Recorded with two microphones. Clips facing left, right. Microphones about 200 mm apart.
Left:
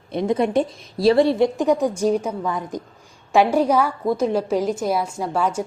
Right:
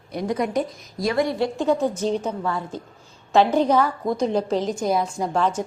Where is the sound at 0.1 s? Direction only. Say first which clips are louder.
Left 4 dB; 25° left (ahead or behind).